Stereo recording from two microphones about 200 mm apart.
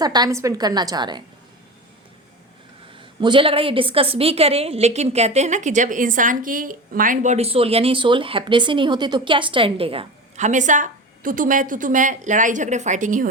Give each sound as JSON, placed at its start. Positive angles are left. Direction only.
{"t": 0.0, "sound": "a woman's voice", "side_deg": -20}
{"t": 3.0, "sound": "a woman's voice", "side_deg": -25}